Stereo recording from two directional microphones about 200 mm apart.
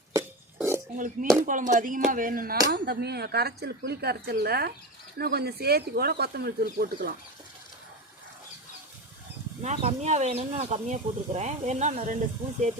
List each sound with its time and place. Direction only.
0.1 s cough: 15° right (ahead or behind)
0.9 s speech: 40° right (ahead or behind)
9.6 s speech: 35° right (ahead or behind)